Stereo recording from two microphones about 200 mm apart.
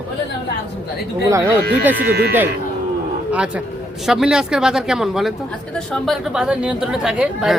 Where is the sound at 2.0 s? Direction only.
50° right (ahead or behind).